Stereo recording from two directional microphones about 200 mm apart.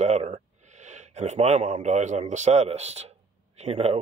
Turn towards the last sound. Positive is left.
turn(degrees=-35)  # may be behind; listen again after turning